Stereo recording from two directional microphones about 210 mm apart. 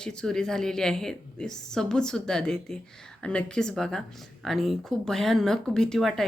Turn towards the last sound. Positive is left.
turn(degrees=0)  # may be behind; listen again after turning